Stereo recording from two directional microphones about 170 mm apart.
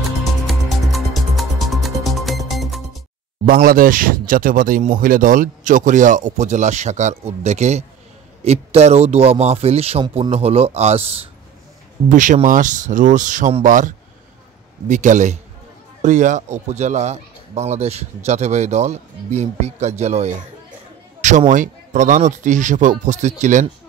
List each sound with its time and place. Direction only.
0.5 s music: centre (ahead or behind)
3.4 s speech: 55° right (ahead or behind); by 11.2 s 35° right (ahead or behind)
12.1 s speech: 50° right (ahead or behind)